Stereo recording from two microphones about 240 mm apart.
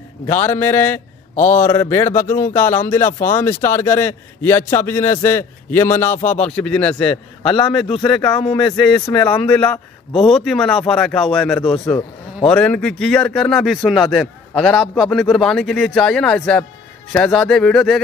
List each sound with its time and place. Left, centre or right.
0.5 s a man's voice: centre
1.3 s a man's voice: left
1.7 s a man's voice: centre
3.1 s speech: left
3.3 s a man's voice: centre
6.1 s speech: left
6.4 s a man's voice: centre
7.4 s speech: left
8.7 s a man's voice: centre